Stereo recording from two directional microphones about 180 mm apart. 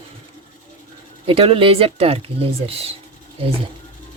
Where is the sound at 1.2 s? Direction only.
30° right (ahead or behind).